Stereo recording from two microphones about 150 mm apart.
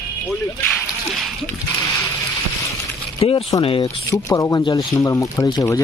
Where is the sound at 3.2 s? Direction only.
40° left (ahead or behind).